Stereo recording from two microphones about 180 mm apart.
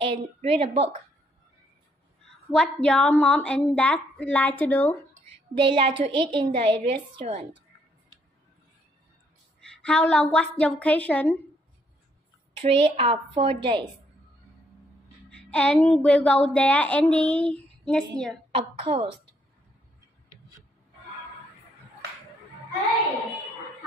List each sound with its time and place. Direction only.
0.0 s a woman's voice: 35° right (ahead or behind)
2.5 s a woman's voice: 5° left (ahead or behind)
5.6 s a woman's voice: 30° right (ahead or behind)
9.6 s a woman's voice: 5° left (ahead or behind)
12.6 s a woman's voice: 30° right (ahead or behind)
15.2 s child singing: 5° left (ahead or behind)
16.0 s a woman's voice: 10° left (ahead or behind)
18.5 s a woman's voice: 35° right (ahead or behind)